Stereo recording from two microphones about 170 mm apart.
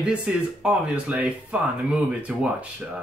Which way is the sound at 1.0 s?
5° right (ahead or behind).